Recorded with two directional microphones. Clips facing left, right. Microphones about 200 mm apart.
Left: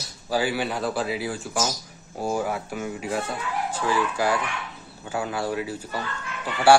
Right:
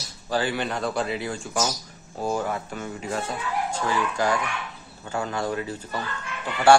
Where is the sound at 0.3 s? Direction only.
10° left (ahead or behind).